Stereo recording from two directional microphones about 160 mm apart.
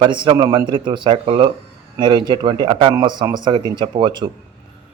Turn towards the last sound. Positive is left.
turn(degrees=-30)  # may be behind; listen again after turning